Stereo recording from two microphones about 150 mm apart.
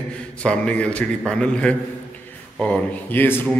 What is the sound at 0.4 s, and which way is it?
A man's voice, 5° left (ahead or behind).